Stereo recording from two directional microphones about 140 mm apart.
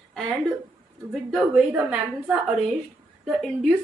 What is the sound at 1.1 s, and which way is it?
A woman's voice, 5° right (ahead or behind).